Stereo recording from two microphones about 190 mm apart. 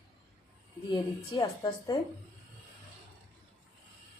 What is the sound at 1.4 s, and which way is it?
Speech, 20° left (ahead or behind).